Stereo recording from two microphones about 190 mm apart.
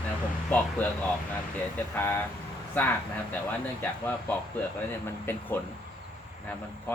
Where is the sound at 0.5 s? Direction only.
10° left (ahead or behind).